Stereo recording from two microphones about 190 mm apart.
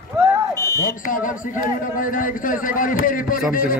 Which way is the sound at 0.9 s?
45° left (ahead or behind).